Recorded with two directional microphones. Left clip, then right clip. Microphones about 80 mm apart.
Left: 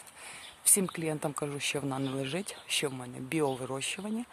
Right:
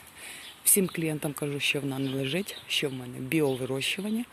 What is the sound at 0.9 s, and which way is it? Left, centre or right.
Speech, left.